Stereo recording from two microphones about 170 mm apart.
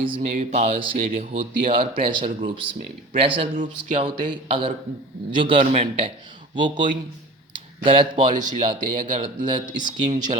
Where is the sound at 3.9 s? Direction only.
30° right (ahead or behind).